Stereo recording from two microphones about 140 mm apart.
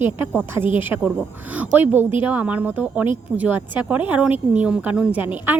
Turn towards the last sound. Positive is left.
turn(degrees=-15)  # may be behind; listen again after turning